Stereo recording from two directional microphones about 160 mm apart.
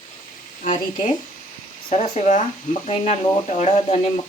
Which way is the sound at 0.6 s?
55° left (ahead or behind).